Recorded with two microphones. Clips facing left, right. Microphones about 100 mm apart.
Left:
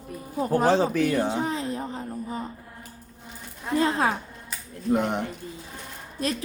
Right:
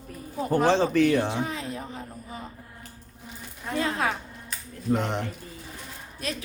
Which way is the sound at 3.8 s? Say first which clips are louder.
Left 4 dB; 30° left (ahead or behind).